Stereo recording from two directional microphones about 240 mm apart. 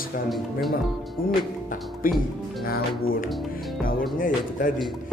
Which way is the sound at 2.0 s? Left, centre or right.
Left.